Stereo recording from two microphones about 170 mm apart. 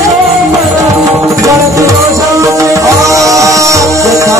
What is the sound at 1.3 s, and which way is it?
Music, 20° right (ahead or behind).